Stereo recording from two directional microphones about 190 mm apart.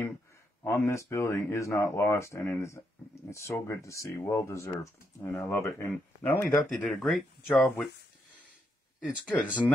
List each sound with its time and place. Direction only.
0.7 s speech: 15° left (ahead or behind)
9.0 s speech: 5° left (ahead or behind)